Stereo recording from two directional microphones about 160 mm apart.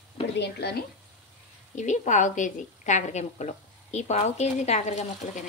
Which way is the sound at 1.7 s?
50° left (ahead or behind).